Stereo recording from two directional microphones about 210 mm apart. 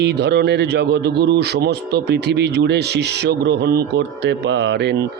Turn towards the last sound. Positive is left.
turn(degrees=-55)  # may be behind; listen again after turning